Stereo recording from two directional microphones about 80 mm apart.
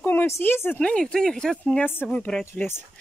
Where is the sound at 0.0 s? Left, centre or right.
Left.